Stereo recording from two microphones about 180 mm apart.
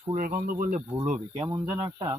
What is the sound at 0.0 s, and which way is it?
Speech, 45° right (ahead or behind).